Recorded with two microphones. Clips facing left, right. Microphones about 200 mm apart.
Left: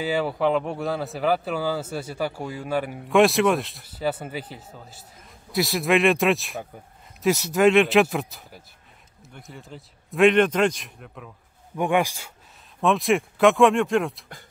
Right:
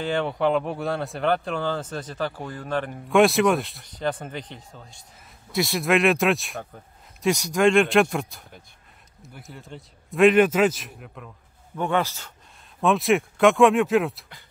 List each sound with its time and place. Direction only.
0.0 s speech: 5° left (ahead or behind)
11.7 s a man's voice: 15° left (ahead or behind)
12.8 s speech: centre (ahead or behind)